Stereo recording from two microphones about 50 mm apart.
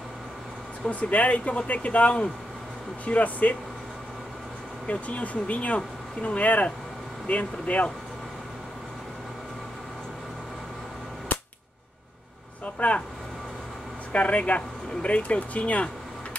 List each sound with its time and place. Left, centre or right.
0.8 s speech: left
4.8 s speech: left
11.3 s cap gun: left
12.7 s speech: left
14.1 s speech: left